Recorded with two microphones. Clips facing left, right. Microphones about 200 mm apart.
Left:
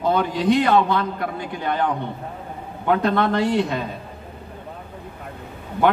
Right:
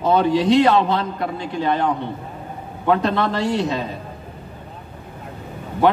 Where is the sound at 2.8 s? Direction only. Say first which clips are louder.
Even; 55° left (ahead or behind).